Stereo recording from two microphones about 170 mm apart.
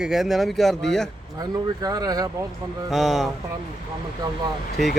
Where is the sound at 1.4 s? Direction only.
20° right (ahead or behind).